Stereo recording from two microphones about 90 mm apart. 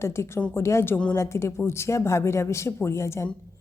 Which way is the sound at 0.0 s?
30° left (ahead or behind).